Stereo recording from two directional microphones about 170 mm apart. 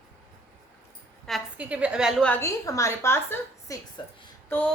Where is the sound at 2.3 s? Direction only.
15° left (ahead or behind).